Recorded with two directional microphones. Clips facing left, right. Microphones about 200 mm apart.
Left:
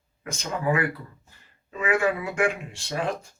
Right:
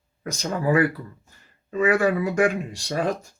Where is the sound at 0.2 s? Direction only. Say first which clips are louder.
Right 4 dB; 35° right (ahead or behind).